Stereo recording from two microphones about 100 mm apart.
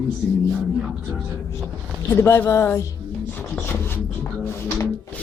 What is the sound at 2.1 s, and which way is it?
Speech, 25° left (ahead or behind).